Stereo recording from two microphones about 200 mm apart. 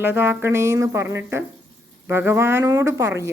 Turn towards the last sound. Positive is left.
turn(degrees=-15)  # may be behind; listen again after turning